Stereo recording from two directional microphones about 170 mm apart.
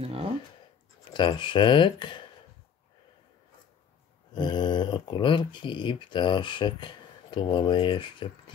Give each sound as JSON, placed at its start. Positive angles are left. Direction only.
{"t": 0.0, "sound": "speech", "side_deg": -35}
{"t": 1.1, "sound": "speech", "side_deg": 30}
{"t": 4.3, "sound": "speech", "side_deg": 25}